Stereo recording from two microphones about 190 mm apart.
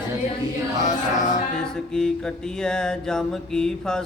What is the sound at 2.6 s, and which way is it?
Mantra, 5° left (ahead or behind).